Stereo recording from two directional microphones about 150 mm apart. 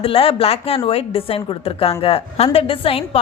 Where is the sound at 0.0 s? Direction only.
40° left (ahead or behind).